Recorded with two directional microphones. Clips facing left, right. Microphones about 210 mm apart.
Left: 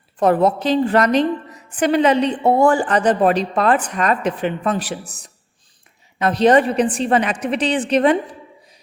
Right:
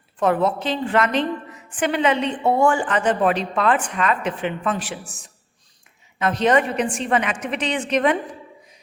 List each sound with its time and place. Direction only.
0.2 s a woman's voice: 40° left (ahead or behind)